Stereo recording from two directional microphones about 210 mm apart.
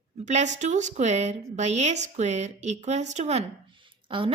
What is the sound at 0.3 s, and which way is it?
Speech, 35° right (ahead or behind).